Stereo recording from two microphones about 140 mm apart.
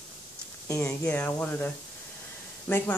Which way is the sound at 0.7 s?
20° left (ahead or behind).